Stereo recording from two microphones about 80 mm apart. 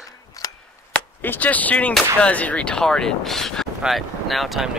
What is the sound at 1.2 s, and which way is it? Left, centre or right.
Speech, left.